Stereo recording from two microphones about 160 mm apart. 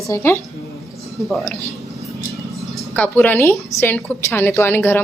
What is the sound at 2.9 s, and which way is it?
A woman's voice, 10° left (ahead or behind).